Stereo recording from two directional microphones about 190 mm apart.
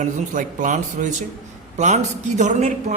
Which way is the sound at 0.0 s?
45° right (ahead or behind).